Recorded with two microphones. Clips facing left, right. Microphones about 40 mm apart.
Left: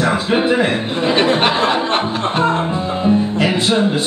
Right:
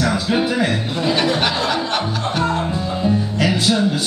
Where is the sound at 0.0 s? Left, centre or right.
Left.